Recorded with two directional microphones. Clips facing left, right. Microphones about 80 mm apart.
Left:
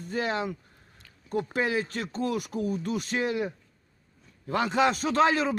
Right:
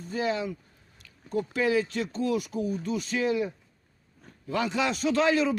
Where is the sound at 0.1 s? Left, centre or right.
Left.